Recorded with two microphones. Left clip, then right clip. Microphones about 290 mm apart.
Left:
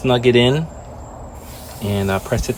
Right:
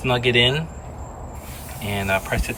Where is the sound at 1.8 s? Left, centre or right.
Centre.